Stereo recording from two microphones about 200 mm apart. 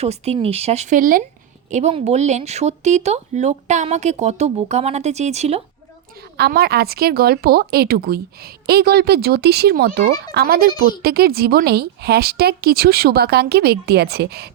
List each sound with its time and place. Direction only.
0.0 s speech: 30° right (ahead or behind)
6.3 s a woman's voice: 50° right (ahead or behind)